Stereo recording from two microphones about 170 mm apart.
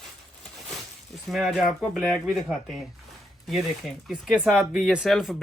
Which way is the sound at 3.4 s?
Centre (ahead or behind).